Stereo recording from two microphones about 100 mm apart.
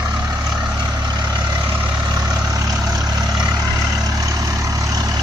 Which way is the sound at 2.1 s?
40° right (ahead or behind).